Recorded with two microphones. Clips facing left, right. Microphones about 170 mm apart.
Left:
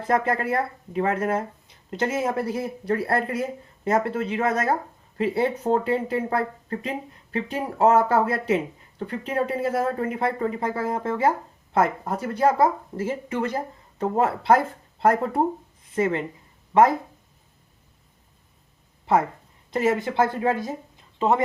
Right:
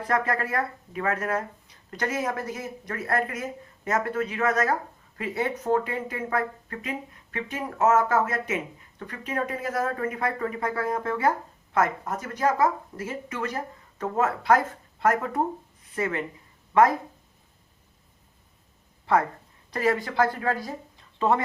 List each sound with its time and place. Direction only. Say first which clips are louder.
0.0 s speech: left 3 dB; 25° left (ahead or behind)
19.7 s speech: left 3 dB; 25° left (ahead or behind)